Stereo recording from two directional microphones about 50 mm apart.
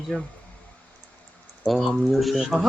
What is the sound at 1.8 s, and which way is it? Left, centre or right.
Speech, centre.